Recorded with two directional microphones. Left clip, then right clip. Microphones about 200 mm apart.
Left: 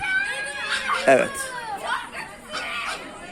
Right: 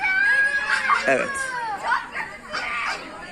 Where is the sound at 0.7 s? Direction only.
45° left (ahead or behind).